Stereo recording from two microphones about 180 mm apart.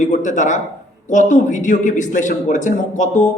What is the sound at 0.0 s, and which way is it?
A man's voice, 40° left (ahead or behind).